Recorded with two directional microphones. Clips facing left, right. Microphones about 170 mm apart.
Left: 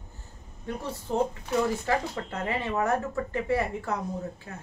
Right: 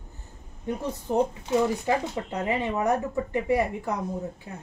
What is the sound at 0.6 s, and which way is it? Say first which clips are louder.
Speech: right 4 dB; 20° right (ahead or behind).